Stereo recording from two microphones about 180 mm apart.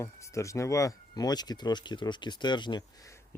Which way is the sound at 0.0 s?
15° left (ahead or behind).